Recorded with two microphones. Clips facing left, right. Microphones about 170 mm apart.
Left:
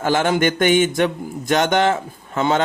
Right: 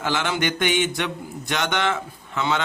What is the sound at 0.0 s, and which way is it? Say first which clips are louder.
A man's voice: left 7 dB; 45° left (ahead or behind).